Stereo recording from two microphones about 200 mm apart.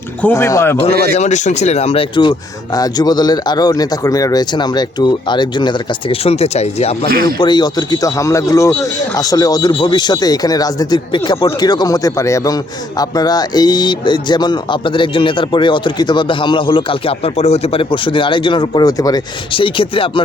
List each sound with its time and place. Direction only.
0.2 s speech: 10° left (ahead or behind)
1.1 s speech: 35° left (ahead or behind)
7.1 s speech: 50° right (ahead or behind)
7.3 s speech: 20° left (ahead or behind)